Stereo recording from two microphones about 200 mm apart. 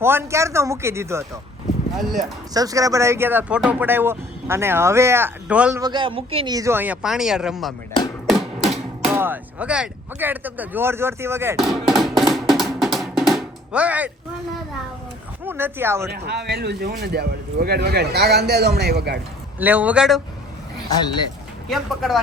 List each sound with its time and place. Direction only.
0.0 s speech: 10° right (ahead or behind)
2.0 s speech: centre (ahead or behind)
2.5 s speech: 15° right (ahead or behind)
5.8 s speech: 25° right (ahead or behind); by 7.7 s 5° right (ahead or behind)
8.3 s music: centre (ahead or behind)
9.1 s speech: 10° right (ahead or behind)
11.5 s music: centre (ahead or behind)
15.4 s speech: 10° right (ahead or behind)
16.1 s speech: 55° right (ahead or behind)
19.5 s speech: 10° right (ahead or behind)
21.7 s speech: centre (ahead or behind)